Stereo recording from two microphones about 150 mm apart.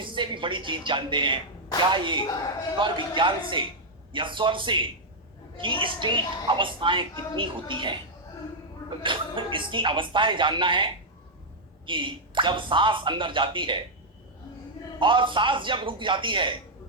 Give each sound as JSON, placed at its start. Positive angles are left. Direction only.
{"t": 0.0, "sound": "a woman's voice", "side_deg": -35}
{"t": 9.0, "sound": "a woman's voice", "side_deg": -35}
{"t": 14.9, "sound": "a woman's voice", "side_deg": -35}